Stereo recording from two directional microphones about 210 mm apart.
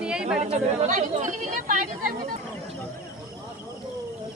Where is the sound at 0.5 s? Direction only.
35° right (ahead or behind).